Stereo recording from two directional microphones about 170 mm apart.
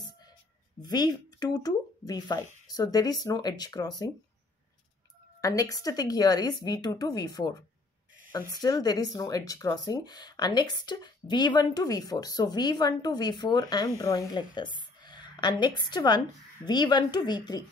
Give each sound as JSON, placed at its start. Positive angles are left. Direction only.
{"t": 0.8, "sound": "speech", "side_deg": 25}
{"t": 5.4, "sound": "speech", "side_deg": 20}
{"t": 8.5, "sound": "a woman's voice", "side_deg": 20}